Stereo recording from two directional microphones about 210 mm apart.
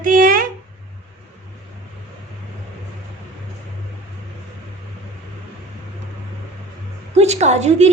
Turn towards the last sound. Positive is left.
turn(degrees=-30)  # may be behind; listen again after turning